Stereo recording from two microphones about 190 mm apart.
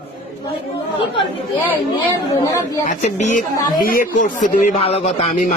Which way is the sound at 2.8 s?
35° left (ahead or behind).